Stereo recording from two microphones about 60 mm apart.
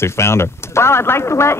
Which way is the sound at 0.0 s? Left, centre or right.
Left.